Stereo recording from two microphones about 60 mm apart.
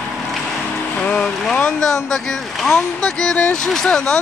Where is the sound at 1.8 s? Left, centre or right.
Centre.